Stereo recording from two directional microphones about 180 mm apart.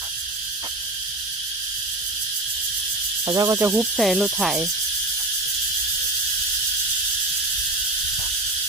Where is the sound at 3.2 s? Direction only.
20° right (ahead or behind).